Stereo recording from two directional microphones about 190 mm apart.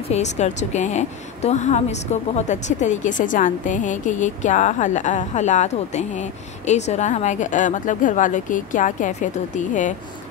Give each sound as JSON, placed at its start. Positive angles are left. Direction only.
{"t": 0.1, "sound": "a woman's voice", "side_deg": 35}